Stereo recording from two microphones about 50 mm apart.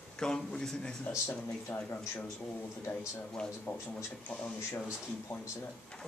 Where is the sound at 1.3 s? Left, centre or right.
Left.